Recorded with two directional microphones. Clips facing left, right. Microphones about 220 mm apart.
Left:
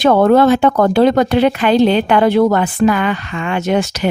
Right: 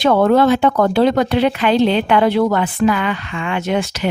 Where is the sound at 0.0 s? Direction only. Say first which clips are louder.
Left 3 dB; 50° left (ahead or behind).